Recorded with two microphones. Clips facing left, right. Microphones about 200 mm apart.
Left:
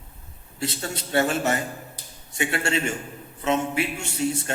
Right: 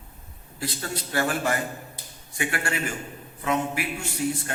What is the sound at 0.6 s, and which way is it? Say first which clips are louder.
A man's voice: left 2 dB; 25° left (ahead or behind).